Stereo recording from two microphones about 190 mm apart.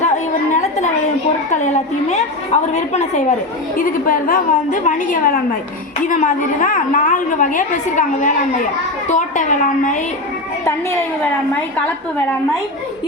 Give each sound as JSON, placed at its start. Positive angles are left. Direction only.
{"t": 1.5, "sound": "a woman's voice", "side_deg": 40}